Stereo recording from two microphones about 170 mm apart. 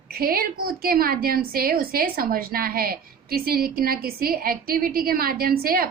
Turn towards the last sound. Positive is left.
turn(degrees=-60)  # may be behind; listen again after turning